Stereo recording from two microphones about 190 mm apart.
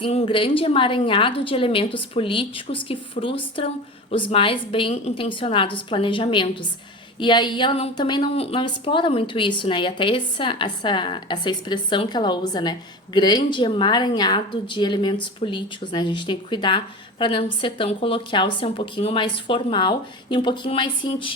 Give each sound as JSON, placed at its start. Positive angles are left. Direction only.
{"t": 0.0, "sound": "speech", "side_deg": 30}